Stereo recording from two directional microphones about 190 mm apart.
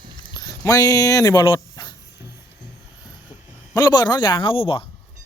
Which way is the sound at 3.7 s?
20° left (ahead or behind).